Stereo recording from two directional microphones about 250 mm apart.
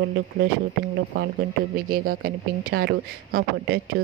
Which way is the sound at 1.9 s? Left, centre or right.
Right.